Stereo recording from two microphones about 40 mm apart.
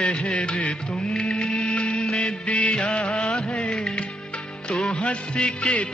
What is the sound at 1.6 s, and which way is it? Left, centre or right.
Music, left.